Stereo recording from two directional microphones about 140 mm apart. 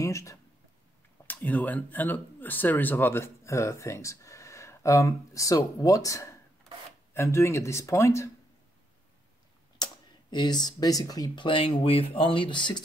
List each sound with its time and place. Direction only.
0.0 s speech: 20° left (ahead or behind)
1.2 s speech: 10° left (ahead or behind)
9.8 s a sound: 30° left (ahead or behind)
10.3 s speech: 30° left (ahead or behind)